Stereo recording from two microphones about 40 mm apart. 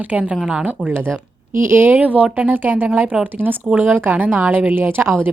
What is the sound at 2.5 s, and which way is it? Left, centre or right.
Speech, right.